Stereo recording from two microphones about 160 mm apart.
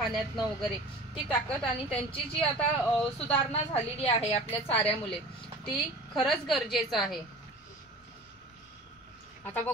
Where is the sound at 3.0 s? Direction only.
10° left (ahead or behind).